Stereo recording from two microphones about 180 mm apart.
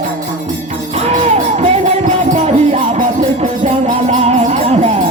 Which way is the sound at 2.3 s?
35° right (ahead or behind).